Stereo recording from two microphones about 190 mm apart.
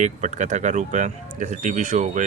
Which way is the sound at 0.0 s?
40° right (ahead or behind).